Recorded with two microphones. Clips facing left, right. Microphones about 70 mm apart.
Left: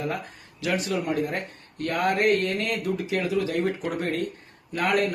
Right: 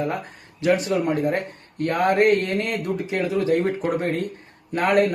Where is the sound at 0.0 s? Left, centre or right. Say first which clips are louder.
Right 4 dB; right.